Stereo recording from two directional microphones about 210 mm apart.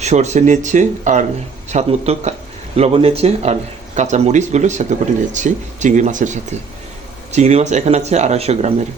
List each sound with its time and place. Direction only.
0.0 s speech: 30° right (ahead or behind)